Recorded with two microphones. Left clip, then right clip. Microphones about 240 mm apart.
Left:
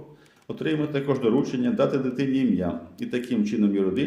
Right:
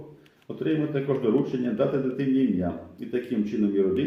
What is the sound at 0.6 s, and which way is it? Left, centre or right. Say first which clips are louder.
A man's voice: left 1 dB; left.